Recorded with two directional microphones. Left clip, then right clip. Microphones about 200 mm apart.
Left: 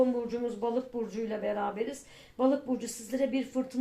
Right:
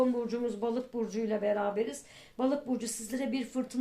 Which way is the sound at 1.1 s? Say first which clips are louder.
Right 2 dB; 40° right (ahead or behind).